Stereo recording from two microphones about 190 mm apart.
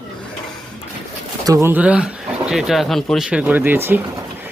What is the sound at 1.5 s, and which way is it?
Speech, 15° right (ahead or behind).